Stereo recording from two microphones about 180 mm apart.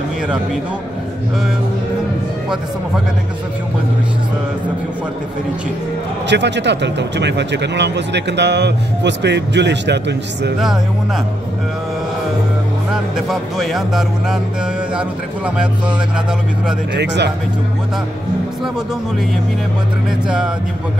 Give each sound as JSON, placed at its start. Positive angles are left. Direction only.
{"t": 6.2, "sound": "speech", "side_deg": -75}
{"t": 12.9, "sound": "speech", "side_deg": 0}
{"t": 16.9, "sound": "speech", "side_deg": -70}